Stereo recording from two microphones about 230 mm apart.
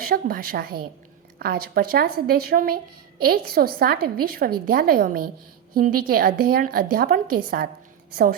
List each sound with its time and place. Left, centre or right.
0.0 s a woman's voice: right